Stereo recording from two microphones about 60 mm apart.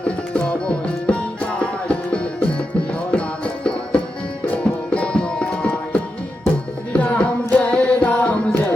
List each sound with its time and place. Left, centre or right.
0.0 s music: left